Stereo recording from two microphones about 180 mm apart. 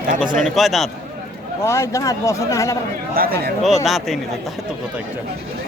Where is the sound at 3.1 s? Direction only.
55° right (ahead or behind).